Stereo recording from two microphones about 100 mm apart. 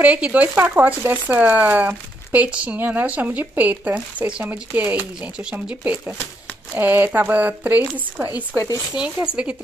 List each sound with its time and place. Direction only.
0.0 s speech: 15° right (ahead or behind)
8.9 s speech: 10° right (ahead or behind)